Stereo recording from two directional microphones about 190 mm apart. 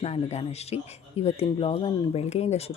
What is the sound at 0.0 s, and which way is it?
Speech, 35° left (ahead or behind).